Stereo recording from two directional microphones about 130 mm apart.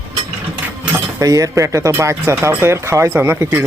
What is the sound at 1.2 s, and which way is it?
Speech, 25° right (ahead or behind).